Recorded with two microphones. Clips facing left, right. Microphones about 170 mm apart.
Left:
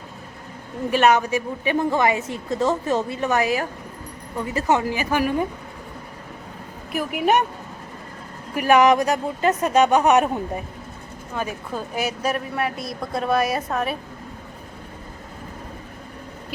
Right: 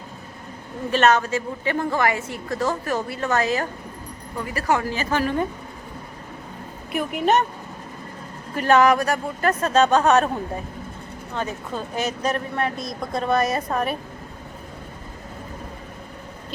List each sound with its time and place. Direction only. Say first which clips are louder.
0.9 s a woman's voice: left 1 dB; 10° left (ahead or behind)
4.4 s a woman's voice: left 2 dB; 20° left (ahead or behind)
6.9 s a woman's voice: even; 5° left (ahead or behind)
8.5 s a woman's voice: left 1 dB; 10° left (ahead or behind)